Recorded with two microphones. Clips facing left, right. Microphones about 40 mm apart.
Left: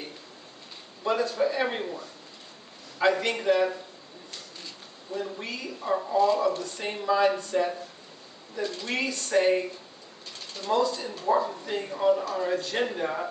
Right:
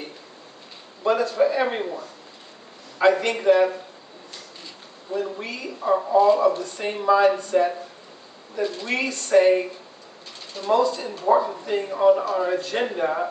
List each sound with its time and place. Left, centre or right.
1.0 s a man's voice: centre
5.4 s a man's voice: centre